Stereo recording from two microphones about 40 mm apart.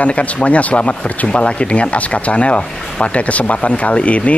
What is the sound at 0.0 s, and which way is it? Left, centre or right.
Speech, left.